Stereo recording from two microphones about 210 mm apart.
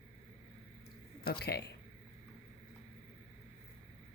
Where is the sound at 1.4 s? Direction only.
50° left (ahead or behind).